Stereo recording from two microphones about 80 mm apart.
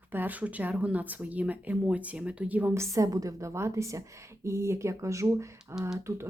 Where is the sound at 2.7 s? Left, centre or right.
Right.